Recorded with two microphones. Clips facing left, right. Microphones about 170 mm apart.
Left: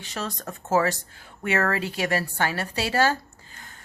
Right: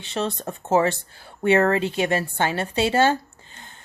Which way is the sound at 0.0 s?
25° right (ahead or behind).